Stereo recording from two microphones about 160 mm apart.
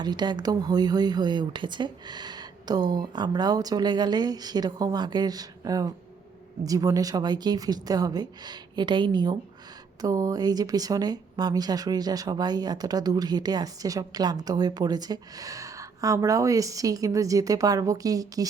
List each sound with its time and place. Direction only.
0.0 s speech: 25° right (ahead or behind)